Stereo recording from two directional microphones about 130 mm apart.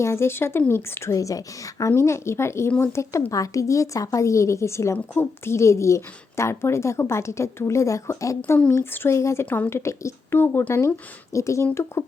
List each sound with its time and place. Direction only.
0.0 s a woman's voice: 20° left (ahead or behind)
8.4 s a woman's voice: 10° left (ahead or behind)